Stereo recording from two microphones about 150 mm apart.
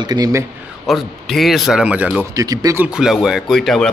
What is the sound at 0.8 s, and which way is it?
Speech, centre (ahead or behind).